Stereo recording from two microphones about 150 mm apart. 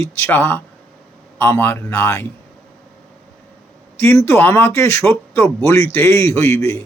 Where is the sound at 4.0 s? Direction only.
15° left (ahead or behind).